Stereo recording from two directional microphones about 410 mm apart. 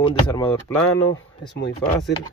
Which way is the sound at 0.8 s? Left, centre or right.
Left.